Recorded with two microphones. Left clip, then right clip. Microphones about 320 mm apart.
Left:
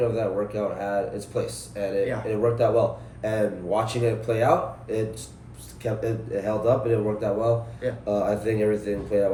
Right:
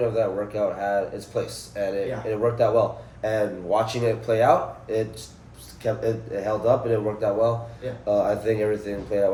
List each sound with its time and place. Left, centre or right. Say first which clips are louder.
0.1 s speech: right 2 dB; centre